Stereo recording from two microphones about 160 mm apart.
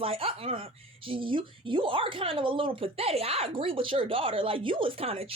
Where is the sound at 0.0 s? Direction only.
35° right (ahead or behind).